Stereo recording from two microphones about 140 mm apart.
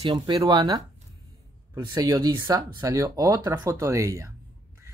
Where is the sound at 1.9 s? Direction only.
25° right (ahead or behind).